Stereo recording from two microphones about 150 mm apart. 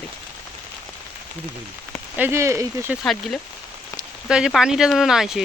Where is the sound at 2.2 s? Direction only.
15° right (ahead or behind).